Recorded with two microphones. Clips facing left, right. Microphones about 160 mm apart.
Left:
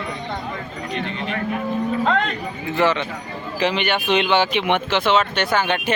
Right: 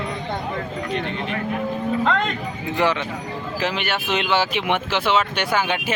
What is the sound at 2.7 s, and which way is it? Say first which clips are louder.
Speech: left 2 dB; 15° right (ahead or behind).